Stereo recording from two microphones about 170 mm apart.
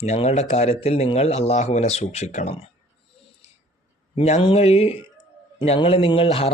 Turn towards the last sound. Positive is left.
turn(degrees=35)  # may be behind; listen again after turning